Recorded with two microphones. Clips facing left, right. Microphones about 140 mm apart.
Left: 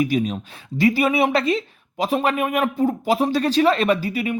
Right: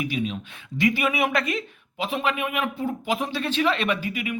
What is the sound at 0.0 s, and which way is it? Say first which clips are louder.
A man's voice: left 7 dB; 40° left (ahead or behind).